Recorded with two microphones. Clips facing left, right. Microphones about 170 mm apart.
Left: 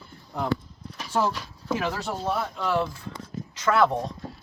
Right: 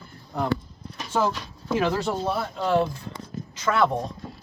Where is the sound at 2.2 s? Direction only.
30° right (ahead or behind).